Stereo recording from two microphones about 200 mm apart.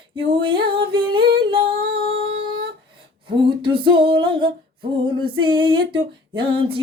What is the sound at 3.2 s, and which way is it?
Female singing, 25° right (ahead or behind).